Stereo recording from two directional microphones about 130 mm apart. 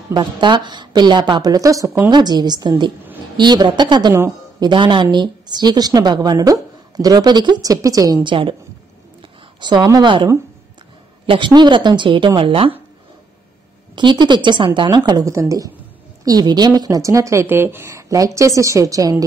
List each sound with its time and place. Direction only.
0.1 s a woman's voice: 35° right (ahead or behind)
9.6 s a woman's voice: 35° right (ahead or behind)
13.9 s a woman's voice: 35° right (ahead or behind)